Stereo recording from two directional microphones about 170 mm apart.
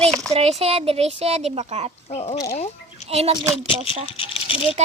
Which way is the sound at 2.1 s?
40° left (ahead or behind).